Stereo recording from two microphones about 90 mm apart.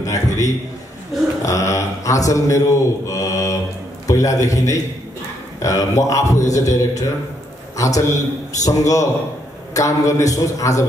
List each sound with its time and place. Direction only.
0.0 s a sound: 40° left (ahead or behind)
1.4 s a man's voice: 35° left (ahead or behind)
3.1 s mantra: 35° left (ahead or behind)
4.1 s a man's voice: 40° left (ahead or behind)